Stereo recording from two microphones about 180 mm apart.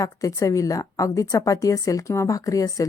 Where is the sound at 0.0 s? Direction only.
20° left (ahead or behind).